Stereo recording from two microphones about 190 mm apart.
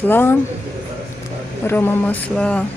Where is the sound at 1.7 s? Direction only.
10° left (ahead or behind).